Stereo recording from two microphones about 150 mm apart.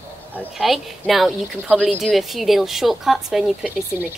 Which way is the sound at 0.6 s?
Centre (ahead or behind).